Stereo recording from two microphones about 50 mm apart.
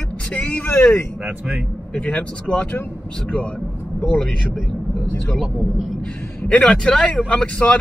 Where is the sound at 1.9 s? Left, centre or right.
Left.